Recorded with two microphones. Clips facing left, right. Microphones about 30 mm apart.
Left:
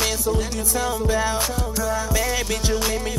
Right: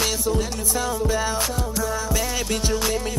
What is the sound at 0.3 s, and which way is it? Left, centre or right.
Music, centre.